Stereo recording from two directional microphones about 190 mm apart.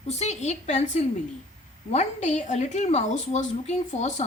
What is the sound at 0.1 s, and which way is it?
A woman's voice, 35° left (ahead or behind).